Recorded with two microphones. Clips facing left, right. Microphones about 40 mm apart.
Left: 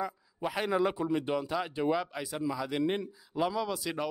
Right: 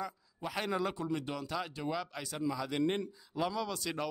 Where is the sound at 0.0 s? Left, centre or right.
Centre.